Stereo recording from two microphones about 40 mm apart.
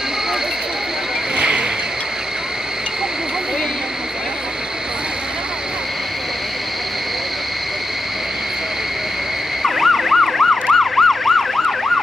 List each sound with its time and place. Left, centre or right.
1.3 s vehicle: right
9.6 s emergency vehicle: centre